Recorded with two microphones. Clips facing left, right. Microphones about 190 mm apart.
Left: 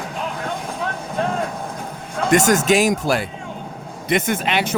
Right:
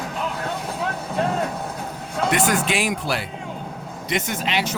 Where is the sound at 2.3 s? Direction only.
45° left (ahead or behind).